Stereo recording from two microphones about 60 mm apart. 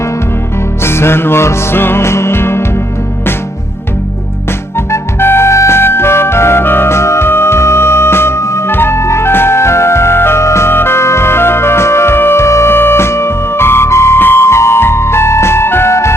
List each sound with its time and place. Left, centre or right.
0.9 s music: left
4.9 s music: left
8.7 s music: left